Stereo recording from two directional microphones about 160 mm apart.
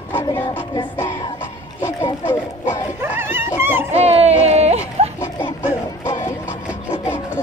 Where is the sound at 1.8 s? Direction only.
15° left (ahead or behind).